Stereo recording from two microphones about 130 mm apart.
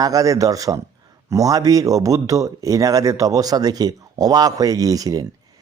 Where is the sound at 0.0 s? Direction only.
25° right (ahead or behind).